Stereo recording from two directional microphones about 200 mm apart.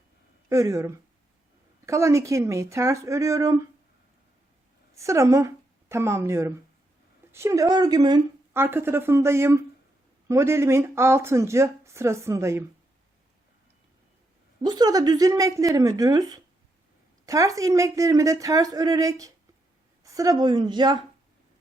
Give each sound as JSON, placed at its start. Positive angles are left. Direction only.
{"t": 0.4, "sound": "a woman's voice", "side_deg": -15}
{"t": 4.9, "sound": "a woman's voice", "side_deg": -15}
{"t": 14.6, "sound": "a woman's voice", "side_deg": -20}